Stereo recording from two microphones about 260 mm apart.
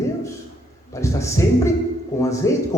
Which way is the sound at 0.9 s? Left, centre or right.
Centre.